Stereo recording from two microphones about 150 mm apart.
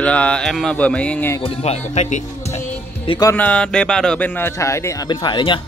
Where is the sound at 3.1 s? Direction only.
25° left (ahead or behind).